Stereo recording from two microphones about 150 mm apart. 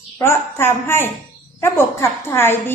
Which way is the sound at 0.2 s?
15° left (ahead or behind).